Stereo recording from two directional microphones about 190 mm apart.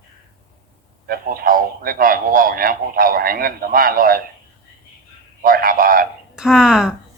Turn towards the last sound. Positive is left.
turn(degrees=-5)  # may be behind; listen again after turning